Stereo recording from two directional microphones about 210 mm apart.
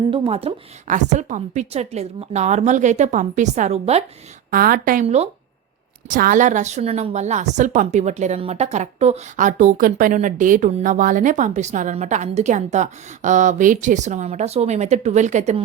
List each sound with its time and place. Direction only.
0.1 s a woman's voice: 30° right (ahead or behind)
4.5 s a woman's voice: 45° right (ahead or behind)
6.1 s a woman's voice: 40° right (ahead or behind)